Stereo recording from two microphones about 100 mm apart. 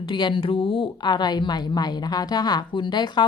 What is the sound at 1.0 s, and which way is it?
A woman's voice, 45° left (ahead or behind).